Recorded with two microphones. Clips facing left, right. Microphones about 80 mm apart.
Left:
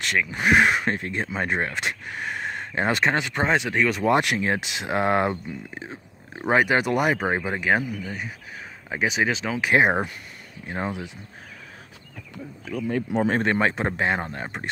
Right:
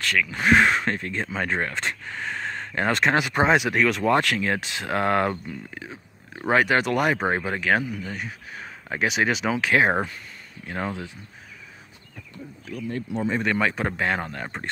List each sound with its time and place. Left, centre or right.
0.0 s speech: left
0.4 s speech: centre
2.4 s a sound: centre
3.2 s speech: centre
3.7 s speech: centre
4.0 s speech: centre
6.3 s speech: centre
9.6 s speech: centre
13.1 s speech: left
13.4 s speech: left
13.7 s speech: left